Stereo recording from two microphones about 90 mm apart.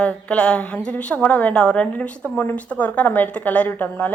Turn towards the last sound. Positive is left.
turn(degrees=20)  # may be behind; listen again after turning